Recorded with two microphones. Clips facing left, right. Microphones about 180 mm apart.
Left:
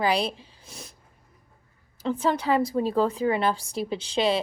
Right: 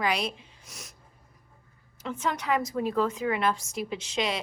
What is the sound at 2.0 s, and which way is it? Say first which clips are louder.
A woman's voice: left 5 dB; 30° left (ahead or behind).